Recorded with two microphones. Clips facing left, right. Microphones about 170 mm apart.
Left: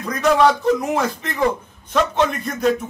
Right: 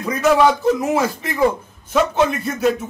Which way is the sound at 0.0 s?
5° right (ahead or behind).